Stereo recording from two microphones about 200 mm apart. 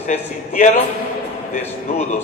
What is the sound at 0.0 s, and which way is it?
Speech, 35° left (ahead or behind).